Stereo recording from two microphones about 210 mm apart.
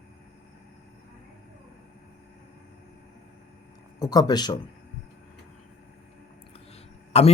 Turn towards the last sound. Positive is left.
turn(degrees=30)  # may be behind; listen again after turning